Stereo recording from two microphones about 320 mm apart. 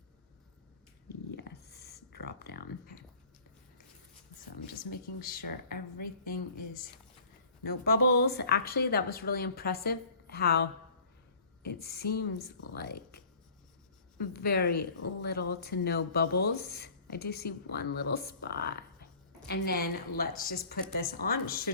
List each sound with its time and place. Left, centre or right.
1.3 s a sound: left
4.6 s speech: left
7.6 s speech: left
11.6 s speech: left
14.2 s speech: left